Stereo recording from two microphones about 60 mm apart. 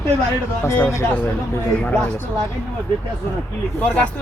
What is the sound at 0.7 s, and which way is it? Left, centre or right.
Speech, left.